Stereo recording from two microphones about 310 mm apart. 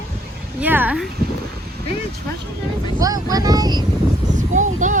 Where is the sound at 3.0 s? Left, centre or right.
Centre.